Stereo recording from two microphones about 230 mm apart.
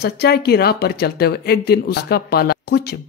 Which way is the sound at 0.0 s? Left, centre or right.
Left.